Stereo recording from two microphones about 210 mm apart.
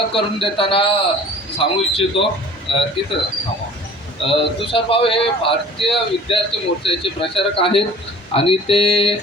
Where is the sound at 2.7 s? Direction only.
25° left (ahead or behind).